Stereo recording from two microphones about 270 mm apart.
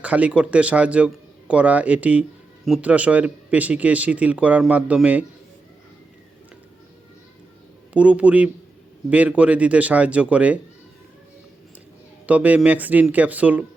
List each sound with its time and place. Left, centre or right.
0.0 s speech: centre
7.9 s speech: centre
12.2 s speech: centre